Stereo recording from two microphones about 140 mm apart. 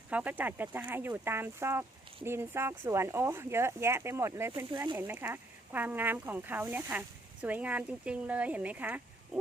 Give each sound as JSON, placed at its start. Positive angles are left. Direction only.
{"t": 0.1, "sound": "speech", "side_deg": -10}